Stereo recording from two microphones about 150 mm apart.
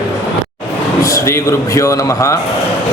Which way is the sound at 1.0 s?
20° left (ahead or behind).